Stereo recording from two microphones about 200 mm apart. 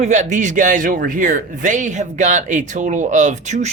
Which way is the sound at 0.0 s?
35° right (ahead or behind).